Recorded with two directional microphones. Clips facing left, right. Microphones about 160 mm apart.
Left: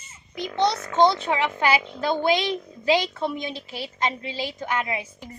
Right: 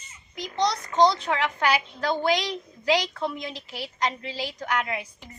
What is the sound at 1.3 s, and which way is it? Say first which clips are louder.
Speech: left 2 dB; 20° left (ahead or behind).